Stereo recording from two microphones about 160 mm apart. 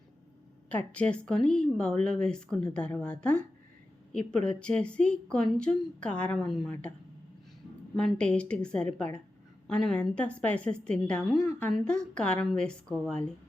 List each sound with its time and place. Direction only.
0.7 s a woman's voice: 10° left (ahead or behind)
7.9 s a woman's voice: 5° left (ahead or behind)